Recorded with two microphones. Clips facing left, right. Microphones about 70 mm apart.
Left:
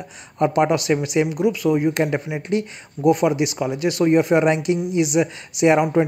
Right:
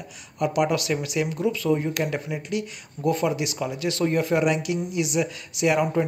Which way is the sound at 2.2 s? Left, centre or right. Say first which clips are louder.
Left 6 dB; left.